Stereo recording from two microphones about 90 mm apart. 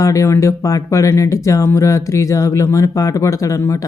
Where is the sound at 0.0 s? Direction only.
35° left (ahead or behind).